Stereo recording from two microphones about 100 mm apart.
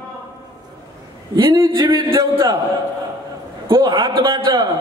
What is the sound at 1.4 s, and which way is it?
A man's voice, 50° right (ahead or behind).